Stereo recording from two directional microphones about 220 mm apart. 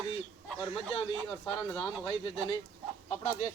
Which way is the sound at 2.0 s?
20° left (ahead or behind).